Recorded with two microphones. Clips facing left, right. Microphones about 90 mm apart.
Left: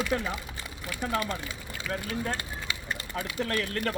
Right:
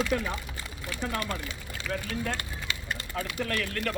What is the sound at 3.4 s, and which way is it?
Speech, 35° left (ahead or behind).